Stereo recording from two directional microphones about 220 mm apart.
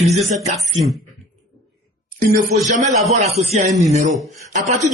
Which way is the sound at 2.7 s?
35° right (ahead or behind).